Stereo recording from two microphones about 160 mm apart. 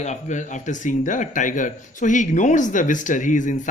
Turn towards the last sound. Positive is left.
turn(degrees=50)  # may be behind; listen again after turning